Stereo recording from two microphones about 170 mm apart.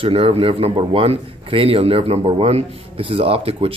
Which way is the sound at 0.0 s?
35° right (ahead or behind).